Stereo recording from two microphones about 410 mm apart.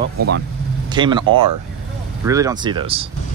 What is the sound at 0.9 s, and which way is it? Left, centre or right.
Speech, centre.